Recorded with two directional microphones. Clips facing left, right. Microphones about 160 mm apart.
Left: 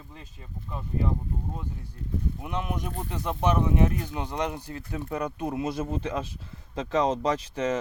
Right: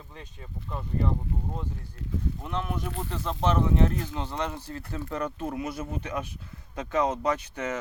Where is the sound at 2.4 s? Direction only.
15° left (ahead or behind).